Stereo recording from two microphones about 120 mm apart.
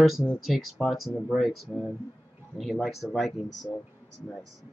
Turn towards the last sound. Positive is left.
turn(degrees=0)  # may be behind; listen again after turning